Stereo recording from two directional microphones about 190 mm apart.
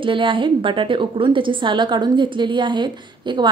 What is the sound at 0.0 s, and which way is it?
A woman's voice, 25° right (ahead or behind).